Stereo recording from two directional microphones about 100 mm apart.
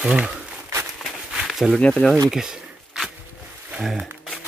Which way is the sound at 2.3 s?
5° right (ahead or behind).